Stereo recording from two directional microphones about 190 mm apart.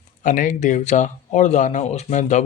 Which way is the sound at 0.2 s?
40° left (ahead or behind).